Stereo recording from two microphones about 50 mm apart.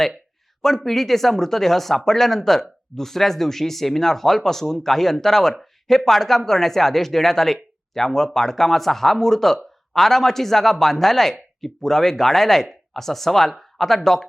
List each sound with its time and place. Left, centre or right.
0.6 s speech: centre